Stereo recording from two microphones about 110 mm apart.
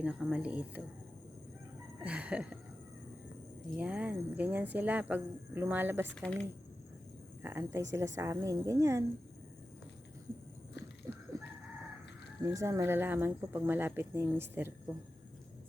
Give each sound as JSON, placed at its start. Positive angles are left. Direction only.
{"t": 0.0, "sound": "speech", "side_deg": -10}
{"t": 2.0, "sound": "speech", "side_deg": -10}
{"t": 3.8, "sound": "speech", "side_deg": -10}
{"t": 6.1, "sound": "speech", "side_deg": 10}
{"t": 7.4, "sound": "speech", "side_deg": -20}
{"t": 11.1, "sound": "a sound", "side_deg": -30}
{"t": 12.4, "sound": "speech", "side_deg": -30}